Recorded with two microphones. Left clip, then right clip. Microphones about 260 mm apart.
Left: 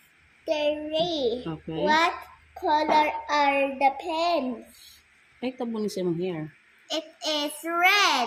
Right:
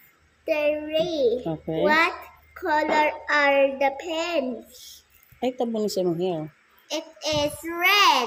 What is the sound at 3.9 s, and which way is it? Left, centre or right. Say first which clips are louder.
Speech: left 1 dB; right.